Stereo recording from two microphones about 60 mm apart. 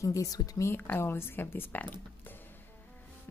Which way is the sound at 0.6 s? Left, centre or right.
Left.